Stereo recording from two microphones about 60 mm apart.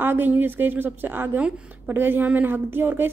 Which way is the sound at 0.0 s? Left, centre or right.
Right.